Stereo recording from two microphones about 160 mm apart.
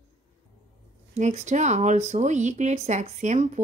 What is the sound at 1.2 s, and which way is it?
Speech, 45° right (ahead or behind).